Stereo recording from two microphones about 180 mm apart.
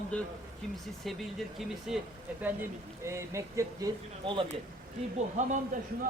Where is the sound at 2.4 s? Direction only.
15° right (ahead or behind).